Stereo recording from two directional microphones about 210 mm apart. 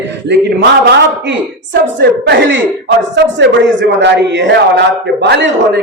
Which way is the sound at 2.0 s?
55° right (ahead or behind).